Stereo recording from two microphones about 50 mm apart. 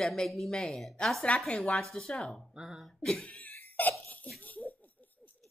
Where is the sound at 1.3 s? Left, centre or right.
Left.